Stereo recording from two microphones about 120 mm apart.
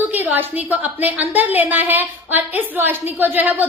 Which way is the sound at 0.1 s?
15° right (ahead or behind).